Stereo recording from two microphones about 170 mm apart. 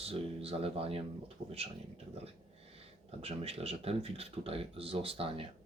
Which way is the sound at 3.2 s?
35° right (ahead or behind).